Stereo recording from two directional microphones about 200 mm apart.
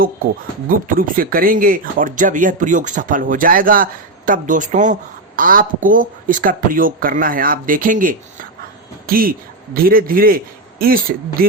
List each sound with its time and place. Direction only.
0.7 s a man's voice: 45° right (ahead or behind)